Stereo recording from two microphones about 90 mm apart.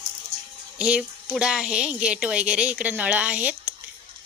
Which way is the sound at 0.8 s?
15° right (ahead or behind).